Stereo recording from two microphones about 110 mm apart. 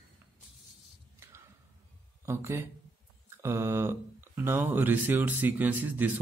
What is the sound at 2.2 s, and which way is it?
Speech, 20° right (ahead or behind).